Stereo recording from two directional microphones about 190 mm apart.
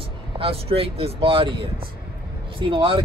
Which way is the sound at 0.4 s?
30° right (ahead or behind).